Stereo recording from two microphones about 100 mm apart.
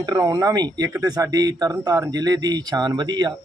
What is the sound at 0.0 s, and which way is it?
Speech, 40° right (ahead or behind).